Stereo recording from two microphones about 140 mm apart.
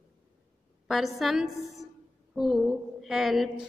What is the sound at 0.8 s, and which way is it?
A woman's voice, centre (ahead or behind).